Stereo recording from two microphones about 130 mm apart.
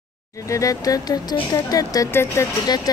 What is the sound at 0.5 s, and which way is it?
Speech, 25° left (ahead or behind).